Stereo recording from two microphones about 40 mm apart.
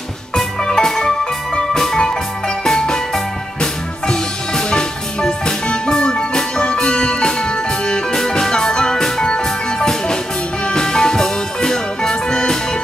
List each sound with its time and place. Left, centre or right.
0.4 s music: centre
4.1 s music: centre